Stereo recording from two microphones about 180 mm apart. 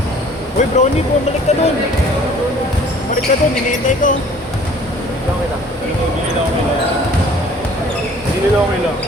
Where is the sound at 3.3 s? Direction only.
45° left (ahead or behind).